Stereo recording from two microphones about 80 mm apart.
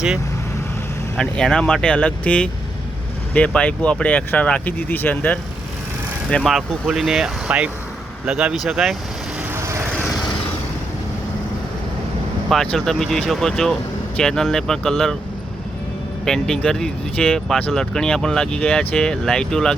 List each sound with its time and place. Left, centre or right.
1.1 s speech: centre
6.4 s speech: centre
9.6 s vehicle: right
12.5 s speech: centre
16.2 s speech: centre